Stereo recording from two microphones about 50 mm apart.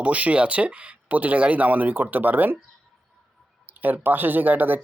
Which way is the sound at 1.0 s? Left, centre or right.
Right.